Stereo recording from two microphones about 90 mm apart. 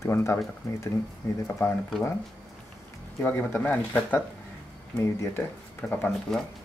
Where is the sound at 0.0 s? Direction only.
30° left (ahead or behind).